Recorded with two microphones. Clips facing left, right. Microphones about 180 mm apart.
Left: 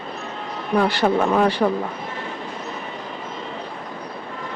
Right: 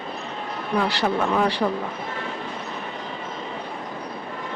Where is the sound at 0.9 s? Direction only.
50° left (ahead or behind).